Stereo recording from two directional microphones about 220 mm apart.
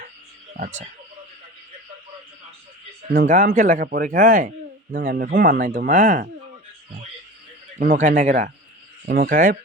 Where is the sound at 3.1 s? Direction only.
40° right (ahead or behind).